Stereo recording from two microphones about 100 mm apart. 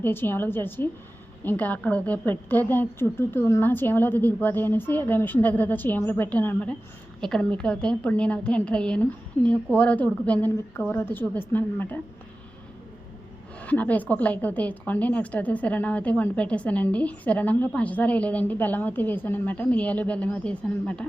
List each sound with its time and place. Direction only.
0.0 s a woman's voice: 20° left (ahead or behind)
7.2 s a woman's voice: 5° left (ahead or behind)
13.6 s a woman's voice: 15° left (ahead or behind)